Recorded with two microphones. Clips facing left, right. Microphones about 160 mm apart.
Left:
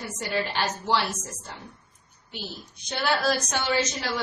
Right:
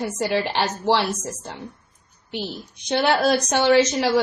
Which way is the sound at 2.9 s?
65° right (ahead or behind).